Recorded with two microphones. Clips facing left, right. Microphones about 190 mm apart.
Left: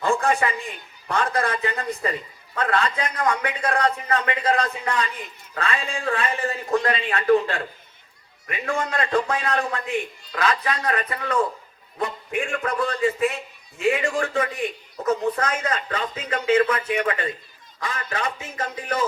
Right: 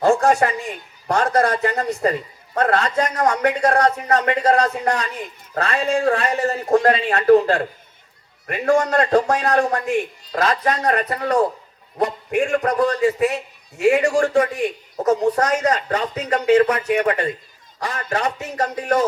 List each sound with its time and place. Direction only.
0.0 s a man's voice: 40° right (ahead or behind)